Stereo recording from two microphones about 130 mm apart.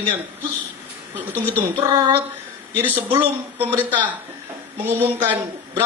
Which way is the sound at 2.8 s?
15° right (ahead or behind).